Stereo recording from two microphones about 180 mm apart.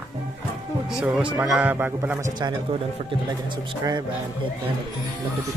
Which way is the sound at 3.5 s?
20° right (ahead or behind).